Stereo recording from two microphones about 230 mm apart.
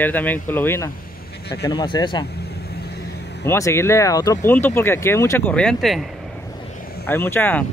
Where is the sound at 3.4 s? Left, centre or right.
Centre.